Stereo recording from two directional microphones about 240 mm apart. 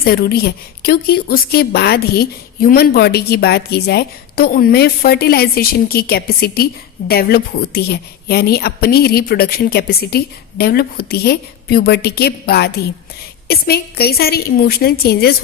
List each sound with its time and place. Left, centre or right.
0.0 s a woman's voice: left